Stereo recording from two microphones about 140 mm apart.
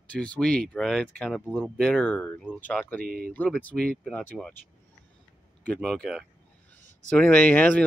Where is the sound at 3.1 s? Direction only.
90° right.